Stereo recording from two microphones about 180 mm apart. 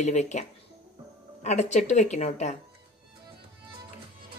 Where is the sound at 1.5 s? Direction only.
40° left (ahead or behind).